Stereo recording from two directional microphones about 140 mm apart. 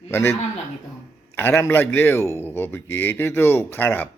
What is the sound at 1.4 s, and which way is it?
A man's voice, 15° left (ahead or behind).